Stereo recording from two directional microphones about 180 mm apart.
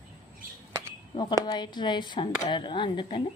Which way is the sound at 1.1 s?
25° left (ahead or behind).